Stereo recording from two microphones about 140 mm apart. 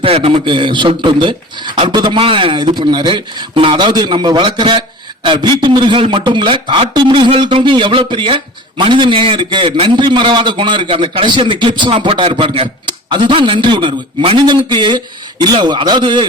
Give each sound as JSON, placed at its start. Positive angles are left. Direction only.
{"t": 0.0, "sound": "a man's voice", "side_deg": -40}